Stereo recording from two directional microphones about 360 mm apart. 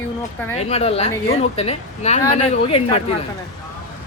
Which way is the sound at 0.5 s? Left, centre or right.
Centre.